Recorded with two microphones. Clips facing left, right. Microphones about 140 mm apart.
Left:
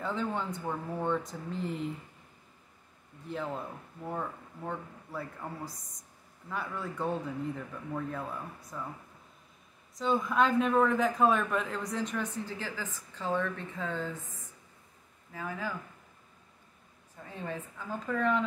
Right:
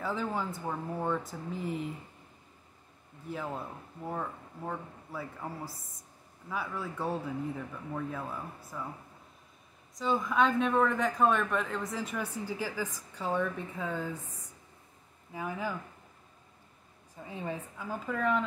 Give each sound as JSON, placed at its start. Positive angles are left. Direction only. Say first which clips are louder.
{"t": 0.0, "sound": "a man's voice", "louder": "even", "side_deg": -5}
{"t": 3.3, "sound": "a man's voice", "louder": "left 1 dB", "side_deg": -5}
{"t": 9.9, "sound": "a man's voice", "louder": "even", "side_deg": 0}
{"t": 15.3, "sound": "a woman's voice", "louder": "right 2 dB", "side_deg": -15}
{"t": 17.2, "sound": "a woman's voice", "louder": "right 1 dB", "side_deg": -15}